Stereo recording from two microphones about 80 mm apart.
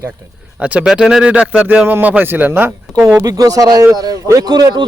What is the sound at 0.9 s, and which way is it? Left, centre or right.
Speech, centre.